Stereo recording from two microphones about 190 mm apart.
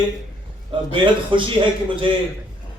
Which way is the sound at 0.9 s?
25° right (ahead or behind).